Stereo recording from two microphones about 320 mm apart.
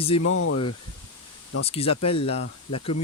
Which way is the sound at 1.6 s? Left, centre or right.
Centre.